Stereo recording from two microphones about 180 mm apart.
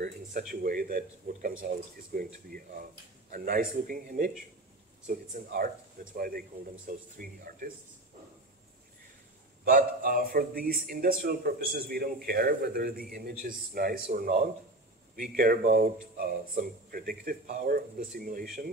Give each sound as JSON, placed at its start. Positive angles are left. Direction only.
{"t": 0.0, "sound": "speech", "side_deg": -50}
{"t": 9.7, "sound": "a man's voice", "side_deg": -50}